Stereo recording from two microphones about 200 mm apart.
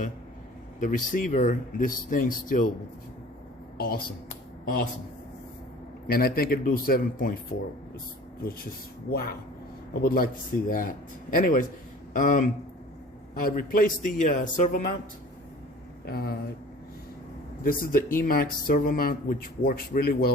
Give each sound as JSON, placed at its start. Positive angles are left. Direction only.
{"t": 0.8, "sound": "speech", "side_deg": 40}
{"t": 3.8, "sound": "speech", "side_deg": 45}
{"t": 6.1, "sound": "speech", "side_deg": 50}
{"t": 9.0, "sound": "speech", "side_deg": 50}
{"t": 16.0, "sound": "speech", "side_deg": 50}
{"t": 17.6, "sound": "speech", "side_deg": 45}